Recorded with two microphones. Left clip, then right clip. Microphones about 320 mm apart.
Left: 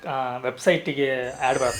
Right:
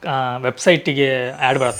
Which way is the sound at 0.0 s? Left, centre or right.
Right.